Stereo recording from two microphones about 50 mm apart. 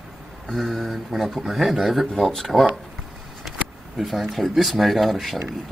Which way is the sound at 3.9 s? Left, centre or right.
Centre.